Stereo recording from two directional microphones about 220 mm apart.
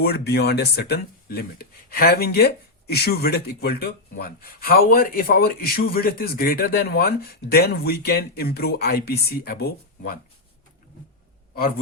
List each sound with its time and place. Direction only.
0.0 s speech: 45° left (ahead or behind)